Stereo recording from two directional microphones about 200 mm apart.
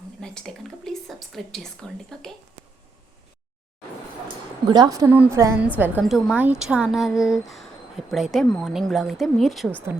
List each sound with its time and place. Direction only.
0.2 s a woman's voice: 5° left (ahead or behind)
4.7 s a woman's voice: 20° right (ahead or behind); by 9.8 s centre (ahead or behind)